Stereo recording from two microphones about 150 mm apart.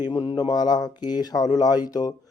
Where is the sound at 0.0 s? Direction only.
25° left (ahead or behind).